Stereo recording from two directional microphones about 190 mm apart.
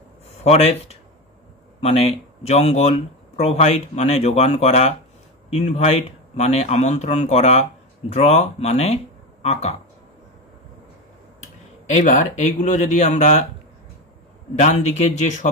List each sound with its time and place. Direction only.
0.3 s speech: 35° left (ahead or behind)
12.0 s speech: 40° left (ahead or behind)
14.5 s speech: 35° left (ahead or behind)